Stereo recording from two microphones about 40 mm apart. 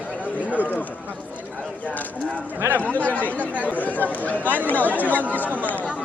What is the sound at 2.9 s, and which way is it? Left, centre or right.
Speech, left.